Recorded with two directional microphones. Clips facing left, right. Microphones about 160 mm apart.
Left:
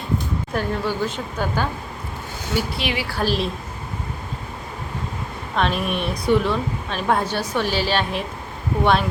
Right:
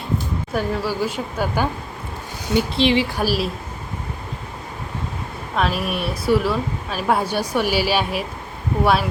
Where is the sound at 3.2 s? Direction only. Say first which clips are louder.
Right 1 dB; 5° right (ahead or behind).